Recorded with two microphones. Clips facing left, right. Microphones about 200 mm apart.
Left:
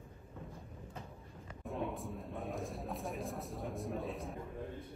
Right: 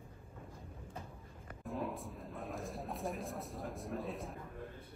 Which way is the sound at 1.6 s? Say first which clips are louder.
Left 1 dB; centre (ahead or behind).